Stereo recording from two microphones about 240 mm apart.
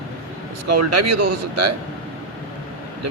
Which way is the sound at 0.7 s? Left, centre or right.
Right.